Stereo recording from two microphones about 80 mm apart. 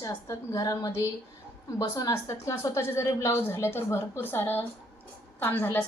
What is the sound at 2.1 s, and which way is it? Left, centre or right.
A woman's voice, left.